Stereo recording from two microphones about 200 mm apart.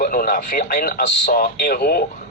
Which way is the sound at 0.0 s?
45° left (ahead or behind).